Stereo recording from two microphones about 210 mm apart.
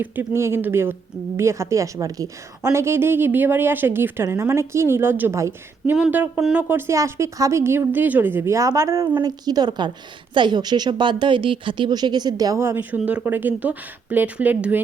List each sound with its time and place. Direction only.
0.0 s a woman's voice: 10° right (ahead or behind)